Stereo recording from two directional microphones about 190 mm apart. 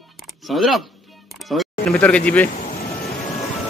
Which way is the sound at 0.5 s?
Centre (ahead or behind).